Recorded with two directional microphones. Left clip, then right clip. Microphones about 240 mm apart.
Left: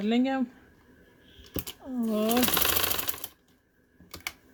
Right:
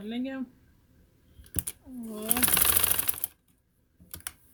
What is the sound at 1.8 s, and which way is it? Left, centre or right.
Speech, left.